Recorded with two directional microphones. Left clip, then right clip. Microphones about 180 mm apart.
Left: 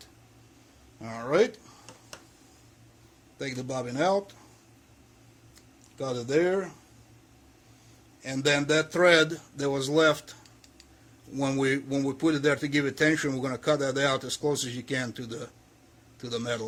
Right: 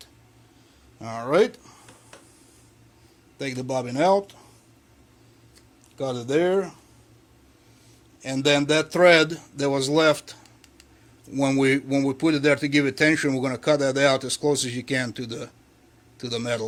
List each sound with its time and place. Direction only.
1.0 s speech: 35° right (ahead or behind)
3.3 s speech: 35° right (ahead or behind)
6.0 s speech: 35° right (ahead or behind)
8.2 s speech: 35° right (ahead or behind)
11.3 s speech: 35° right (ahead or behind)